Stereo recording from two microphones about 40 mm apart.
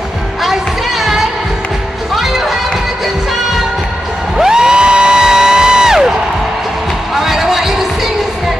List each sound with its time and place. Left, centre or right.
0.4 s music: centre
4.4 s music: centre
7.2 s music: centre